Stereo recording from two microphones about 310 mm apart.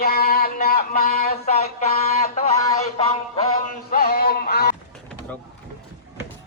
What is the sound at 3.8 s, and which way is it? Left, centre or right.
Music, left.